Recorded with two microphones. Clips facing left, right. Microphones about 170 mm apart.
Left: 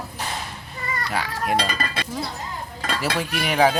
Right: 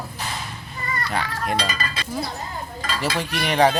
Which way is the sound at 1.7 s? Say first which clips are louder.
Left 2 dB; 55° left (ahead or behind).